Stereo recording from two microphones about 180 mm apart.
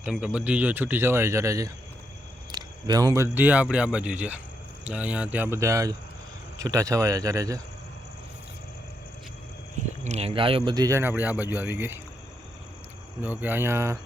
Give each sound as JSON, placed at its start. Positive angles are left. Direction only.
{"t": 0.0, "sound": "speech", "side_deg": -5}
{"t": 10.0, "sound": "speech", "side_deg": -35}
{"t": 13.2, "sound": "speech", "side_deg": -10}